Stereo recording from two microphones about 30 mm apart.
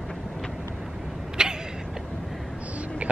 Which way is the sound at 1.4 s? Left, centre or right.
Right.